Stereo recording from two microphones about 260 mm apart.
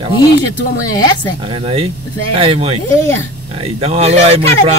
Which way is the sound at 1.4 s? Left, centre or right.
Centre.